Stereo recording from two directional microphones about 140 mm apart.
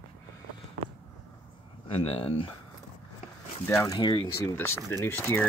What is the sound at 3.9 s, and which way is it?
Speech, 30° left (ahead or behind).